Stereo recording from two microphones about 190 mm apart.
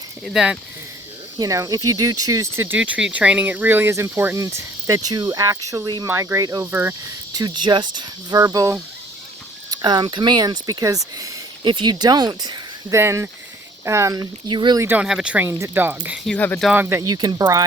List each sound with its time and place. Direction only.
0.3 s speech: 5° right (ahead or behind)
1.4 s speech: 15° right (ahead or behind)
7.3 s speech: 20° right (ahead or behind)
14.8 s speech: 5° right (ahead or behind)
16.3 s speech: 10° left (ahead or behind)
16.6 s speech: 10° right (ahead or behind)